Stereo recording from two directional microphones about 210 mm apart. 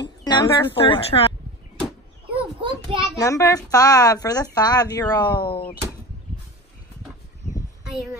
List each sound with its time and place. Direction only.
0.0 s speech: 20° left (ahead or behind)
1.8 s a sound: centre (ahead or behind)
3.2 s speech: 15° left (ahead or behind)